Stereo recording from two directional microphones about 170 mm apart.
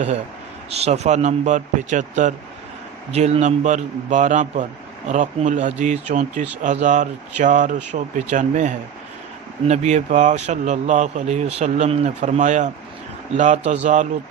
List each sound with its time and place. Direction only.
0.7 s a man's voice: 40° right (ahead or behind)